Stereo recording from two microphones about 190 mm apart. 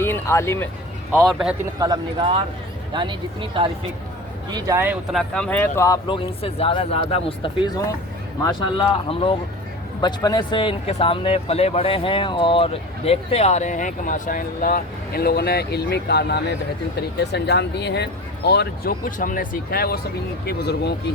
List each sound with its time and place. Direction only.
0.0 s speech: 15° left (ahead or behind)
1.2 s speech: centre (ahead or behind)
1.8 s speech: 20° right (ahead or behind)
5.1 s speech: 5° left (ahead or behind); by 20.9 s 60° left (ahead or behind)